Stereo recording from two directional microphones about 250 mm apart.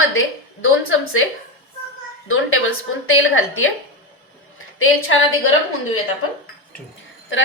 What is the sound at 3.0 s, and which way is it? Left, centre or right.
Speech, left.